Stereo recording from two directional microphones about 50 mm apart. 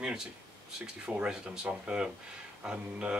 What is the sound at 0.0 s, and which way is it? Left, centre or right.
A man's voice, centre.